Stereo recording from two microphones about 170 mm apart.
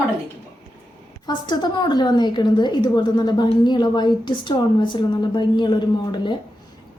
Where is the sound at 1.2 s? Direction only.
25° left (ahead or behind).